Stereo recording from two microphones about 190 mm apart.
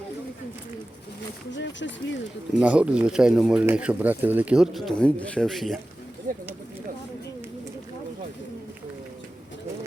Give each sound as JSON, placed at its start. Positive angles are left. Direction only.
{"t": 1.5, "sound": "speech", "side_deg": 70}
{"t": 2.6, "sound": "speech", "side_deg": -5}
{"t": 6.3, "sound": "speech", "side_deg": -45}